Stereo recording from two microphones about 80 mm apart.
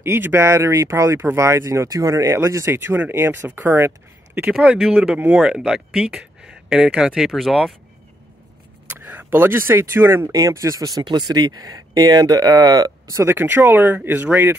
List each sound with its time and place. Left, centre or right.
0.0 s speech: right
2.7 s speech: right
4.6 s speech: centre
8.9 s speech: right
10.3 s speech: right
10.8 s speech: right
13.1 s speech: right
13.4 s speech: right